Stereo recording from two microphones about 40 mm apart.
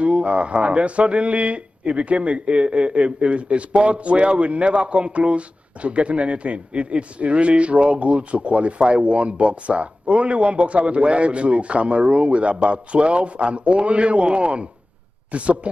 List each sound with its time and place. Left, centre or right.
0.0 s speech: right